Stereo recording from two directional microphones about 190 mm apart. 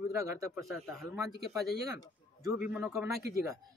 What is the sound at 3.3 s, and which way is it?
Speech, 15° right (ahead or behind).